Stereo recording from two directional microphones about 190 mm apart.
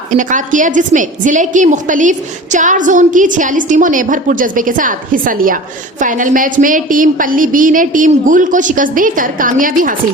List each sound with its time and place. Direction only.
0.1 s a woman's voice: 40° right (ahead or behind)